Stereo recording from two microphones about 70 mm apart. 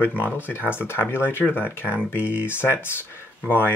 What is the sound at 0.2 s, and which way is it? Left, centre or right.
Speech, left.